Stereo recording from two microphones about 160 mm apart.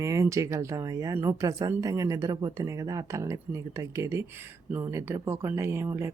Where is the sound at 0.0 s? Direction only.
20° right (ahead or behind).